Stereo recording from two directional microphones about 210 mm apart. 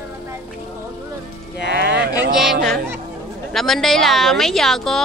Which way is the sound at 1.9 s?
55° right (ahead or behind).